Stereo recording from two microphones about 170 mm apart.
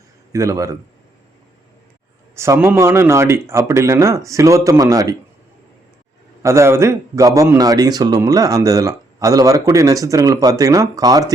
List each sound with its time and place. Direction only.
0.3 s a man's voice: 20° right (ahead or behind)
2.3 s a man's voice: 15° right (ahead or behind)
6.4 s a man's voice: 15° right (ahead or behind)